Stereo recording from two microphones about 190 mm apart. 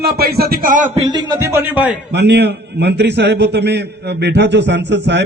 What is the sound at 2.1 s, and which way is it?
A man's voice, 60° right (ahead or behind).